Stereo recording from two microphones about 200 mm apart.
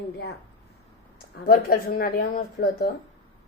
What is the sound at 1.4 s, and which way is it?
A woman's voice, 45° left (ahead or behind).